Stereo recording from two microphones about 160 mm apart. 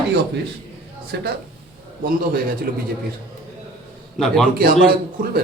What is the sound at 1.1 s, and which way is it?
Speech, 90° right.